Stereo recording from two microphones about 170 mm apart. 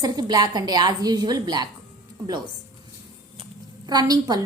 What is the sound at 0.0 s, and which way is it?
A woman's voice, 25° right (ahead or behind).